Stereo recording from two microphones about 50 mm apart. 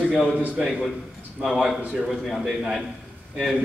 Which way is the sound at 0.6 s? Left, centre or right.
Centre.